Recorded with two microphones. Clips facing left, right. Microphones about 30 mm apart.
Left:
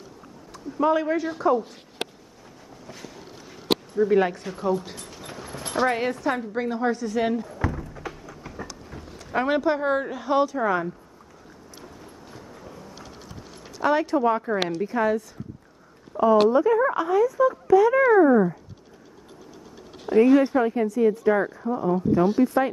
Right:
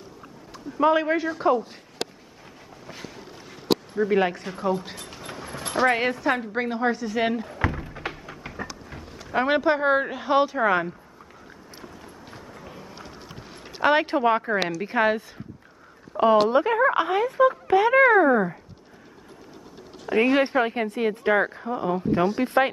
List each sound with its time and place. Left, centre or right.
0.5 s a woman's voice: right
3.9 s a woman's voice: right
5.2 s train: right
5.6 s a woman's voice: centre
7.5 s a sound: right
8.9 s a sound: centre
9.5 s a woman's voice: right
11.8 s a sound: right
13.3 s a sound: right
14.8 s a woman's voice: right
16.2 s speech: right
20.1 s speech: right
21.3 s speech: right